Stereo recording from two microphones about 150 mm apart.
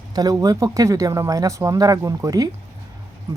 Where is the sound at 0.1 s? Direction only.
25° right (ahead or behind).